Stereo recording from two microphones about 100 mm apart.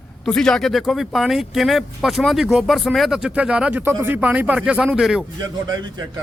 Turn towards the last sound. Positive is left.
turn(degrees=-45)  # may be behind; listen again after turning